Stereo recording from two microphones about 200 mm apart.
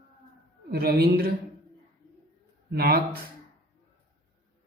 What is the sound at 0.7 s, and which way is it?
Speech, 50° right (ahead or behind).